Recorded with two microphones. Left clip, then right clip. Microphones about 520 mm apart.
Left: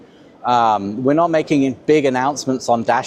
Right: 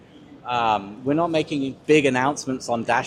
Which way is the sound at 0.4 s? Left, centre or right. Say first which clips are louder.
Left 7 dB; left.